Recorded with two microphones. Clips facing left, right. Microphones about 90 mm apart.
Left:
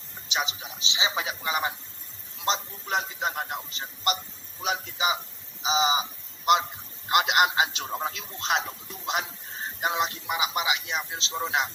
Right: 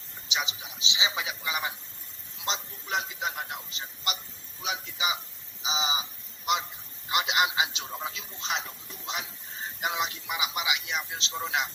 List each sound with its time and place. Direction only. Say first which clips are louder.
0.3 s a man's voice: left 3 dB; 35° left (ahead or behind)
8.0 s a man's voice: left 4 dB; 60° left (ahead or behind)
9.8 s a man's voice: left 4 dB; 35° left (ahead or behind)